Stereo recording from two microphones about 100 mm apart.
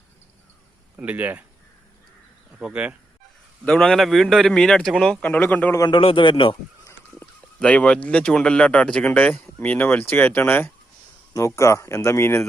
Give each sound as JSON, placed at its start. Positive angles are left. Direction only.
{"t": 0.9, "sound": "speech", "side_deg": -15}
{"t": 2.6, "sound": "speech", "side_deg": -10}
{"t": 3.7, "sound": "a man's voice", "side_deg": 5}
{"t": 5.9, "sound": "a man's voice", "side_deg": 60}
{"t": 7.6, "sound": "speech", "side_deg": 15}
{"t": 11.3, "sound": "speech", "side_deg": 30}